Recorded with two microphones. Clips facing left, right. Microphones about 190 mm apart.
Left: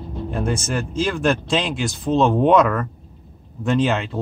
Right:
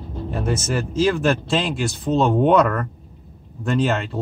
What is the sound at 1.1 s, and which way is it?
Speech, 5° right (ahead or behind).